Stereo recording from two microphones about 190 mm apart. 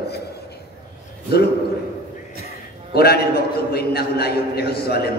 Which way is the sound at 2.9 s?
55° left (ahead or behind).